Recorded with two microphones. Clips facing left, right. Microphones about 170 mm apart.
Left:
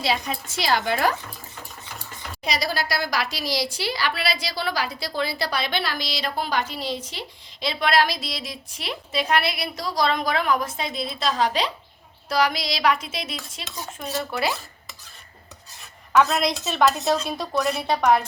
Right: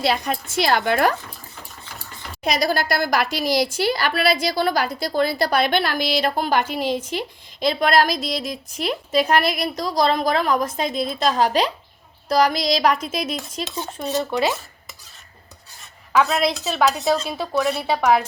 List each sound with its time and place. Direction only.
0.0 s a woman's voice: 55° right (ahead or behind)
2.4 s a woman's voice: 50° right (ahead or behind)
13.7 s dishes: 30° right (ahead or behind)
16.1 s speech: 5° right (ahead or behind)